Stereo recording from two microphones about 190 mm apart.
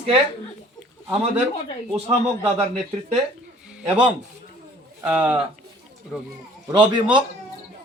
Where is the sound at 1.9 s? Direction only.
30° right (ahead or behind).